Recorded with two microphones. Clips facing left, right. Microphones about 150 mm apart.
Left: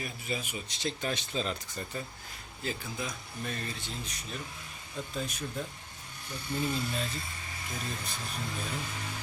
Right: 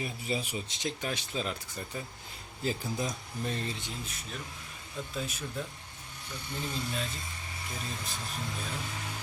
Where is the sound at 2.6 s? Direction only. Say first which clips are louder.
Right 4 dB; 35° right (ahead or behind).